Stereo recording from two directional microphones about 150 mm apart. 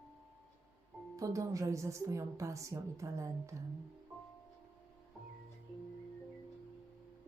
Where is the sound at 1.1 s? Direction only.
20° right (ahead or behind).